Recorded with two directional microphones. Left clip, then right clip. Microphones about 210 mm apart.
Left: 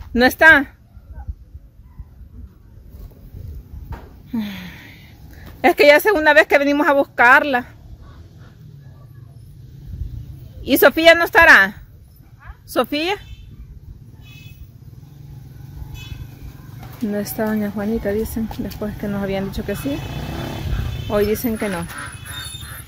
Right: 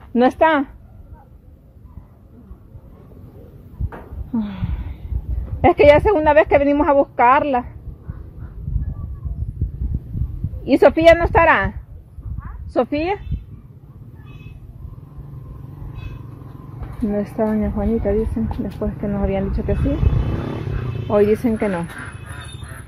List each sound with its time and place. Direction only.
0.1 s a woman's voice: 15° left (ahead or behind)
4.3 s a sound: 10° left (ahead or behind)
5.6 s a woman's voice: 15° left (ahead or behind)
10.6 s a woman's voice: 15° left (ahead or behind)
12.7 s a woman's voice: 15° left (ahead or behind)
17.1 s a woman's voice: 10° left (ahead or behind)
21.1 s speech: centre (ahead or behind)